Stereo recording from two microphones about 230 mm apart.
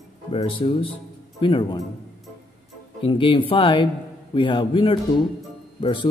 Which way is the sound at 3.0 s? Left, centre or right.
Left.